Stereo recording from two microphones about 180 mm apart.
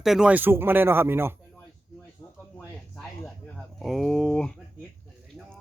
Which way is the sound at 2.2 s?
20° left (ahead or behind).